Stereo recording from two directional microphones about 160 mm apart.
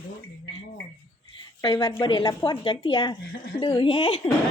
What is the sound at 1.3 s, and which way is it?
A woman's voice, 25° left (ahead or behind).